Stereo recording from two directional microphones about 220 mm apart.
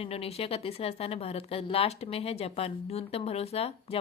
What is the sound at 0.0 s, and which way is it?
A woman's voice, 25° left (ahead or behind).